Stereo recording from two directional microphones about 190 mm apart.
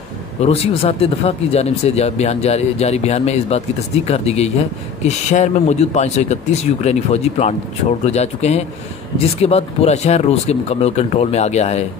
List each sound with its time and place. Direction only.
0.4 s speech: 30° left (ahead or behind)